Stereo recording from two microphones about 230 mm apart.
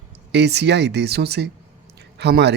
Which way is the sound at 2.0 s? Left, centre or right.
Right.